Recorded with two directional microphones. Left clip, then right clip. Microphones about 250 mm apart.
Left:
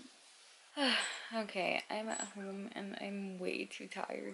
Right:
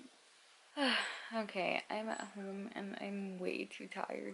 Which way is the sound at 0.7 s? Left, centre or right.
Centre.